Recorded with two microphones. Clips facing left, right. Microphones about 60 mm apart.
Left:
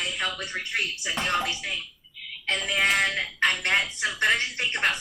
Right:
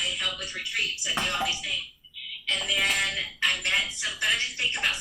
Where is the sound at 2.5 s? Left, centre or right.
Left.